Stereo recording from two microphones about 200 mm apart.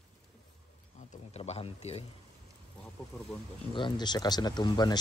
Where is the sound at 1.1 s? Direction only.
30° left (ahead or behind).